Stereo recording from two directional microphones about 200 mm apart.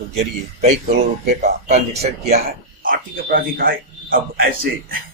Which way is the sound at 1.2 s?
35° right (ahead or behind).